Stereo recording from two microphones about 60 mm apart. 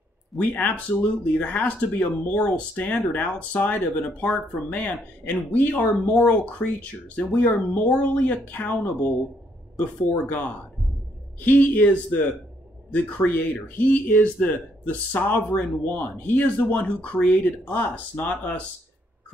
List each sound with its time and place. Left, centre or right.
0.4 s speech: left